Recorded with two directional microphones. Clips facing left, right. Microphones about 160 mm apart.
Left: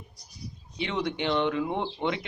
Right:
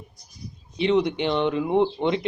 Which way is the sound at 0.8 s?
20° right (ahead or behind).